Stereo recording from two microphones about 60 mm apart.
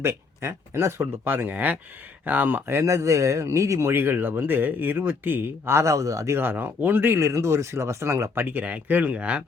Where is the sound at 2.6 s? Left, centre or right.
Right.